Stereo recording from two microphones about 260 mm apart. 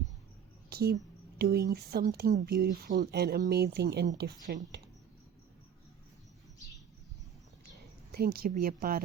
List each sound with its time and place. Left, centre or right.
0.7 s a sound: right
1.4 s a woman's voice: right
8.1 s speech: right